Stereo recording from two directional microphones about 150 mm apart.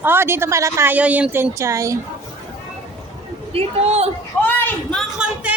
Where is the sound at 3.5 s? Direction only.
45° right (ahead or behind).